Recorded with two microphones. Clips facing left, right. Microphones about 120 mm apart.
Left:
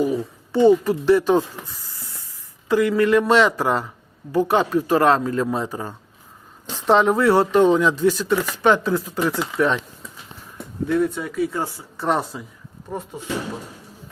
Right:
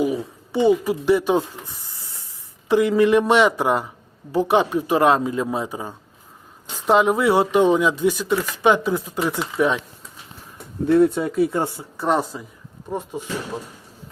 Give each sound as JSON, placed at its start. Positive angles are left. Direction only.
{"t": 0.0, "sound": "speech", "side_deg": -15}
{"t": 10.8, "sound": "speech", "side_deg": -25}
{"t": 11.9, "sound": "speech", "side_deg": 0}